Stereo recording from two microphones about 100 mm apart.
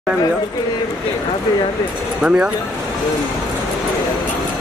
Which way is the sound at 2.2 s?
10° right (ahead or behind).